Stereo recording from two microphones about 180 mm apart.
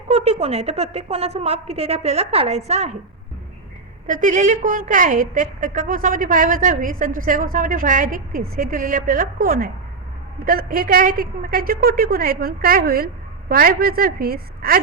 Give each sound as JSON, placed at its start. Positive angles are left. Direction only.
{"t": 0.1, "sound": "a woman's voice", "side_deg": -35}
{"t": 4.0, "sound": "a woman's voice", "side_deg": -45}